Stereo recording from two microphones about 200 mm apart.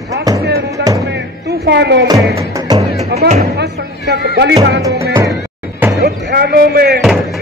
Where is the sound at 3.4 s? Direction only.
55° right (ahead or behind).